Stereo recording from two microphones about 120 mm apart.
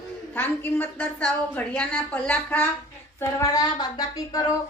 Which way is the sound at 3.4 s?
30° left (ahead or behind).